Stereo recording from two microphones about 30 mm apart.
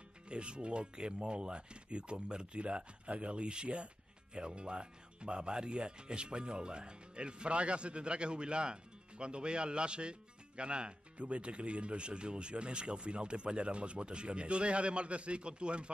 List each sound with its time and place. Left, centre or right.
0.3 s speech: right